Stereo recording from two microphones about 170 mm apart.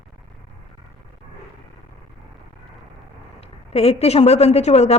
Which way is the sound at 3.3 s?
35° left (ahead or behind).